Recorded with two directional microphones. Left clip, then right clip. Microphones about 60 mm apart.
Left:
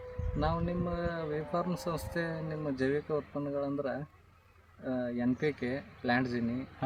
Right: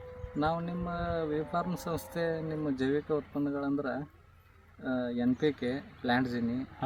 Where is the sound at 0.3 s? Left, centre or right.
Centre.